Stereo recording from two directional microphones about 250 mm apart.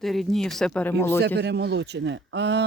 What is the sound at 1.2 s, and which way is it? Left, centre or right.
Speech, right.